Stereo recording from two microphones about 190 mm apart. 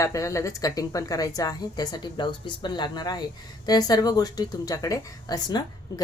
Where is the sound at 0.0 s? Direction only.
15° left (ahead or behind).